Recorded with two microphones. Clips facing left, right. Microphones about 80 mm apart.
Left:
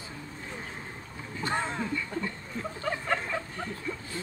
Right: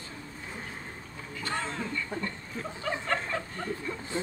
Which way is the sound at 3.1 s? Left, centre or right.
Centre.